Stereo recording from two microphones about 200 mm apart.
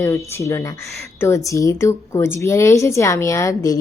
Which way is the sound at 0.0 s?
15° left (ahead or behind).